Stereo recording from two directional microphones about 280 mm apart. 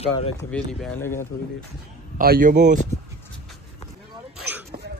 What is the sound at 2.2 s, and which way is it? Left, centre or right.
Speech, right.